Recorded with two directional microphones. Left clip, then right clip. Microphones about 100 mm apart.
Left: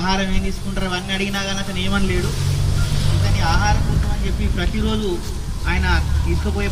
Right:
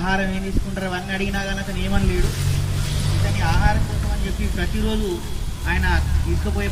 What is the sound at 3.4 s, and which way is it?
Speech, 25° left (ahead or behind).